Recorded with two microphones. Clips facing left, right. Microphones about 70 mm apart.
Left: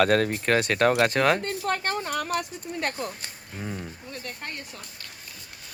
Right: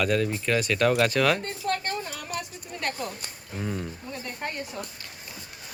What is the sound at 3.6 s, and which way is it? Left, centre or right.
Speech, centre.